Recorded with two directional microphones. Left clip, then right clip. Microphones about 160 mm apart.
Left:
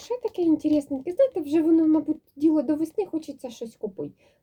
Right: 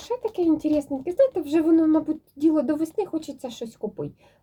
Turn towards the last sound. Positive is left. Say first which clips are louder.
# right 1 dB
turn(degrees=10)  # may be behind; listen again after turning